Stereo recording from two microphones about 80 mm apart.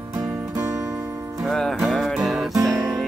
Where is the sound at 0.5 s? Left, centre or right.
Right.